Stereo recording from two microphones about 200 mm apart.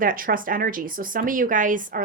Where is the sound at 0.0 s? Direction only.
45° right (ahead or behind).